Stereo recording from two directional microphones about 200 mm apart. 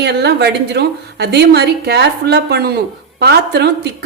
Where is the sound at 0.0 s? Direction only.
55° right (ahead or behind).